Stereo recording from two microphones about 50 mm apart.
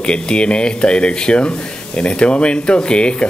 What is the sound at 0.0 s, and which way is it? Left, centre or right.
Speech, centre.